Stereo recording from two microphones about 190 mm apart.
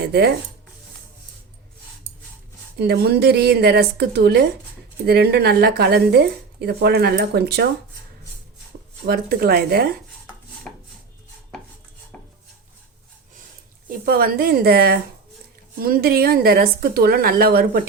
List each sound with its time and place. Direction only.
0.1 s speech: 55° right (ahead or behind)
2.7 s speech: 60° right (ahead or behind)
9.0 s speech: 55° right (ahead or behind)
10.7 s chopping: 5° left (ahead or behind)
12.1 s dishes: 5° left (ahead or behind)
14.0 s speech: 50° right (ahead or behind)